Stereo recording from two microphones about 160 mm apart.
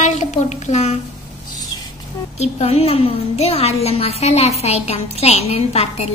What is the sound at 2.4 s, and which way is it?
A woman's voice, 40° left (ahead or behind).